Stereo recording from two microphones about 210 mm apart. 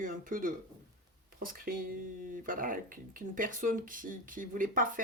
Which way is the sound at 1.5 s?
45° right (ahead or behind).